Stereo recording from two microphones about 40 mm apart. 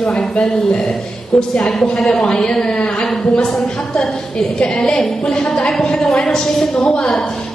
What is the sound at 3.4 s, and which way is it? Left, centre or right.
Speech, centre.